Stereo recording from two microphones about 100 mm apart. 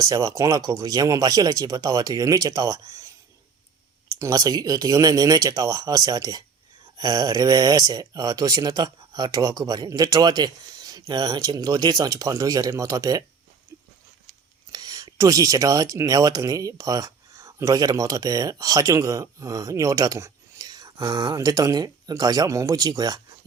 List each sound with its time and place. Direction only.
0.0 s speech: 40° right (ahead or behind)
4.1 s speech: 35° right (ahead or behind)
14.7 s speech: 40° right (ahead or behind)